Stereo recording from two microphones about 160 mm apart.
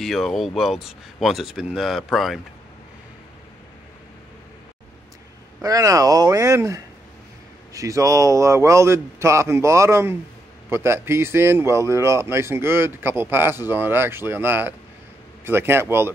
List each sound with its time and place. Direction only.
0.0 s speech: centre (ahead or behind)
5.6 s a man's voice: 20° right (ahead or behind)